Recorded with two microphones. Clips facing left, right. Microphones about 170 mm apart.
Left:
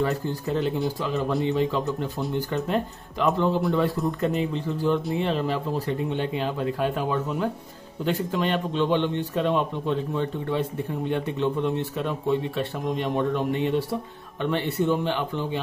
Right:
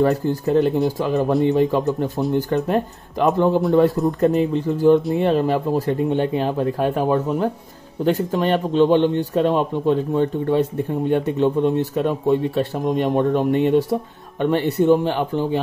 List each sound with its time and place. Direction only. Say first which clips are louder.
0.5 s speech: right 8 dB; 50° right (ahead or behind)